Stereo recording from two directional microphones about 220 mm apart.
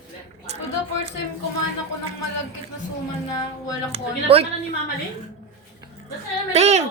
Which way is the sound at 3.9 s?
25° right (ahead or behind).